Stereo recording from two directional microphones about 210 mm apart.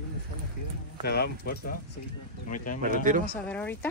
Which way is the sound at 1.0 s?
50° left (ahead or behind).